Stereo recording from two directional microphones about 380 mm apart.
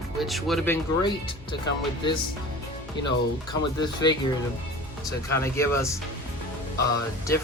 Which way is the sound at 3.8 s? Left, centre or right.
Centre.